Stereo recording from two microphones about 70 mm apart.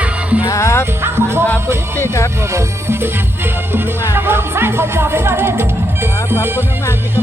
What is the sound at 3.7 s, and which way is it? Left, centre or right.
Music, right.